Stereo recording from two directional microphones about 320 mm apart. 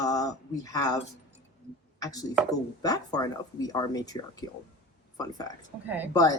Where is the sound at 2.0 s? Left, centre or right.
Centre.